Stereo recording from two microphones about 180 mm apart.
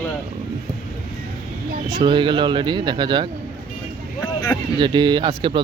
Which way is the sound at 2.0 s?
25° right (ahead or behind).